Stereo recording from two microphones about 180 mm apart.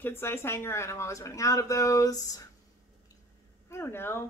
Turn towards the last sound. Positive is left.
turn(degrees=15)  # may be behind; listen again after turning